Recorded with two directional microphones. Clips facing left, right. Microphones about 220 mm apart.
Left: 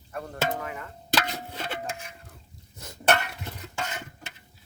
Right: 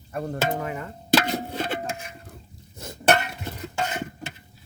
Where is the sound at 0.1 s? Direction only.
25° right (ahead or behind).